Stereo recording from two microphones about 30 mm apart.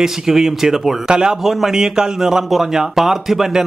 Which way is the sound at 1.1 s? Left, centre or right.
Right.